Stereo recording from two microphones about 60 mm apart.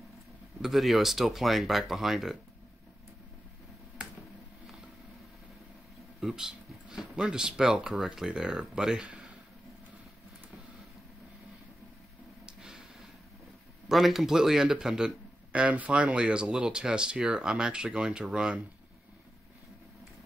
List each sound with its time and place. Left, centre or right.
0.6 s speech: centre
6.2 s speech: centre
13.8 s speech: centre